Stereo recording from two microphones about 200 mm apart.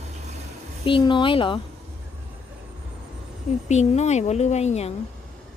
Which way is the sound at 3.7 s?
35° left (ahead or behind).